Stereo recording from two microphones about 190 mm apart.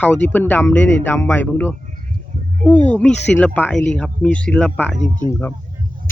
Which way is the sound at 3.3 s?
10° left (ahead or behind).